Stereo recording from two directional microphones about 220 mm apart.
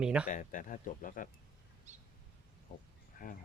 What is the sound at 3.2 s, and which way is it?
Speech, 40° left (ahead or behind).